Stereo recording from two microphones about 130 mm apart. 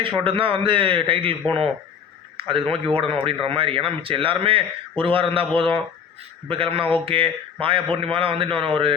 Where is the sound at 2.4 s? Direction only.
45° right (ahead or behind).